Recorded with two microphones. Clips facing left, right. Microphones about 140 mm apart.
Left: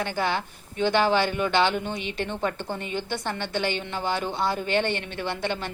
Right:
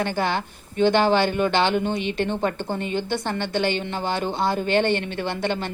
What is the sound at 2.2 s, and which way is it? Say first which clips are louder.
Speech: right 3 dB; 25° right (ahead or behind).